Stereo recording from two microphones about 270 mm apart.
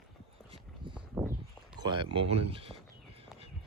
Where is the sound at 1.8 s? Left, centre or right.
Centre.